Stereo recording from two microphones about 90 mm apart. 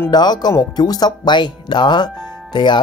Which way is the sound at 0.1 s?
50° left (ahead or behind).